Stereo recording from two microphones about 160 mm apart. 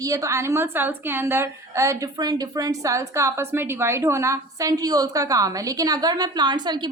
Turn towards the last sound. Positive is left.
turn(degrees=-30)  # may be behind; listen again after turning